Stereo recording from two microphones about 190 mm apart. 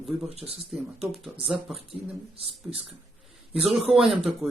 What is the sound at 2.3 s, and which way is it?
Speech, 30° right (ahead or behind).